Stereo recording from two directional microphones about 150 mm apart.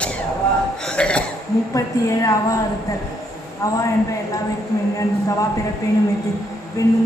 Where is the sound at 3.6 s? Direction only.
20° left (ahead or behind).